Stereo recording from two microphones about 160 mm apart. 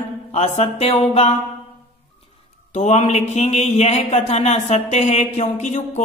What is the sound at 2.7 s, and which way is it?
Speech, 45° left (ahead or behind).